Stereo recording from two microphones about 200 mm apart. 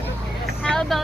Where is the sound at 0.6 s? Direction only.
5° left (ahead or behind).